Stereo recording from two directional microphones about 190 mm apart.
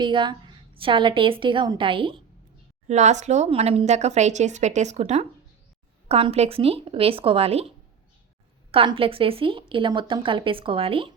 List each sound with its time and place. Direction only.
0.0 s a woman's voice: 25° right (ahead or behind)
2.8 s speech: 40° right (ahead or behind)
8.7 s a woman's voice: 30° right (ahead or behind)